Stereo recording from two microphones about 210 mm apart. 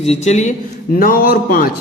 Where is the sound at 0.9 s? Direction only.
45° left (ahead or behind).